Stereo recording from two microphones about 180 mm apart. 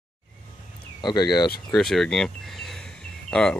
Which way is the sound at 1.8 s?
5° left (ahead or behind).